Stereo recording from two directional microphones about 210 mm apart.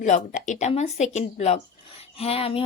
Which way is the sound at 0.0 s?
35° left (ahead or behind).